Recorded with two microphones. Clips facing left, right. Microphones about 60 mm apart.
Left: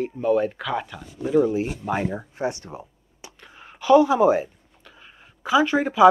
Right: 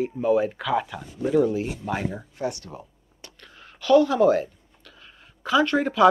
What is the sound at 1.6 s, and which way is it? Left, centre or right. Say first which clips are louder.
Speech: left 3 dB; centre.